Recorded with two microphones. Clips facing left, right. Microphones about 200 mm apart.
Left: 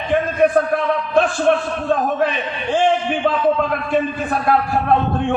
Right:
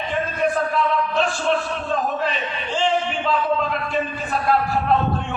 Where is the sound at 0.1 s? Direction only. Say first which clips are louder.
Left 8 dB; 55° left (ahead or behind).